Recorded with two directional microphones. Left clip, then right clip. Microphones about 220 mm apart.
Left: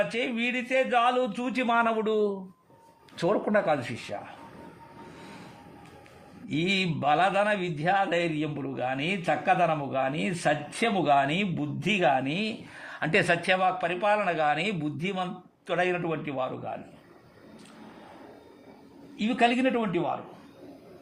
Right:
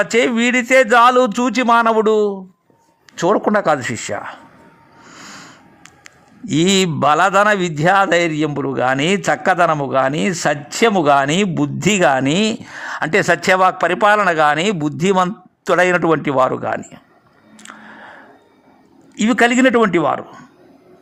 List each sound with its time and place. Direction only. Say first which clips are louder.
0.0 s a man's voice: right 13 dB; 40° right (ahead or behind)
6.5 s a man's voice: right 12 dB; 45° right (ahead or behind)
19.1 s a man's voice: right 11 dB; 45° right (ahead or behind)